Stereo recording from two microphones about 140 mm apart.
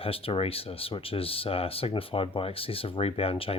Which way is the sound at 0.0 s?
40° left (ahead or behind).